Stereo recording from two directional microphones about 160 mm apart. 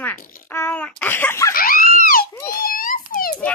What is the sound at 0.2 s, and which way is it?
Speech, 60° left (ahead or behind).